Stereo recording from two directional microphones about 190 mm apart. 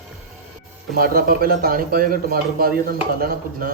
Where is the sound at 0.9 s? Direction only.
50° right (ahead or behind).